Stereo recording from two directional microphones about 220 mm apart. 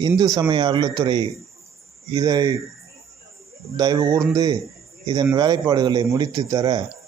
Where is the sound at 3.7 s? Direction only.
15° right (ahead or behind).